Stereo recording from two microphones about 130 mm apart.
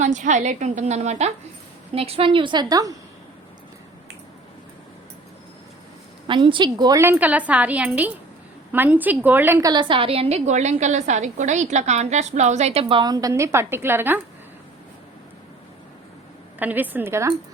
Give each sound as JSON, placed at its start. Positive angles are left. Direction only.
{"t": 0.0, "sound": "a woman's voice", "side_deg": -70}
{"t": 2.0, "sound": "a woman's voice", "side_deg": -50}
{"t": 6.2, "sound": "a woman's voice", "side_deg": -40}
{"t": 7.0, "sound": "a woman's voice", "side_deg": -15}
{"t": 9.6, "sound": "a woman's voice", "side_deg": -35}
{"t": 13.0, "sound": "a woman's voice", "side_deg": -30}
{"t": 16.6, "sound": "a woman's voice", "side_deg": -15}